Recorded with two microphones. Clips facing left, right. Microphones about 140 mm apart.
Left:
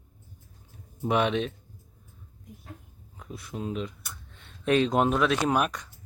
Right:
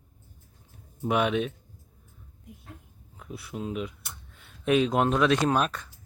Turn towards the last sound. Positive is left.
turn(degrees=10)  # may be behind; listen again after turning